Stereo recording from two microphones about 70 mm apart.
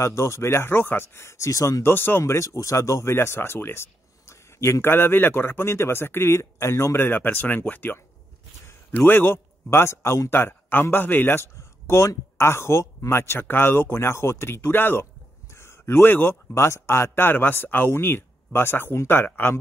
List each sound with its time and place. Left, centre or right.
0.0 s speech: left
1.8 s speech: left
2.3 s speech: left
7.1 s speech: left
10.3 s speech: left
16.5 s speech: left